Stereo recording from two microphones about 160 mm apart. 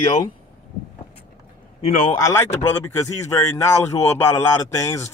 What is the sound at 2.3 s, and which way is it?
Speech, 20° left (ahead or behind).